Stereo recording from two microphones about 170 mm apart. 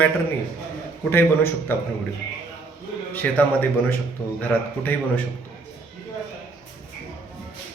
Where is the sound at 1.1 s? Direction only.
15° left (ahead or behind).